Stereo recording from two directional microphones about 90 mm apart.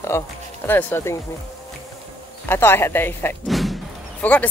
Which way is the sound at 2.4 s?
25° left (ahead or behind).